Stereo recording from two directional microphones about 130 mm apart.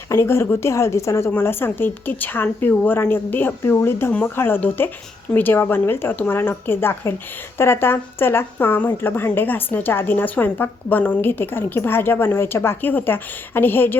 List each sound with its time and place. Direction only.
0.1 s a woman's voice: 20° left (ahead or behind)